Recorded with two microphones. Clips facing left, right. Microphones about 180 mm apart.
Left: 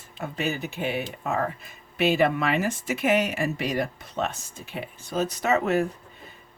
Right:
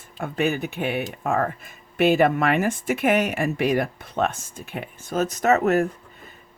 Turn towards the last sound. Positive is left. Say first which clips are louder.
# right 4 dB
turn(degrees=-45)  # may be behind; listen again after turning